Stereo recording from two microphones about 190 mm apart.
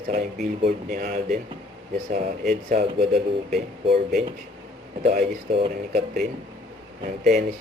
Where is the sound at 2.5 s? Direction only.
50° right (ahead or behind).